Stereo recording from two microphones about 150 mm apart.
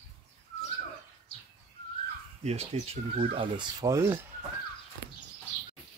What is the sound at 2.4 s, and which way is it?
Speech, 45° right (ahead or behind).